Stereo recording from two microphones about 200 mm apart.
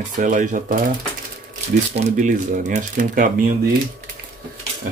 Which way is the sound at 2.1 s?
40° right (ahead or behind).